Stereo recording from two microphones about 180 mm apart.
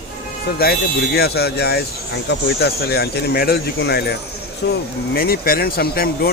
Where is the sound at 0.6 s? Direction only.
60° left (ahead or behind).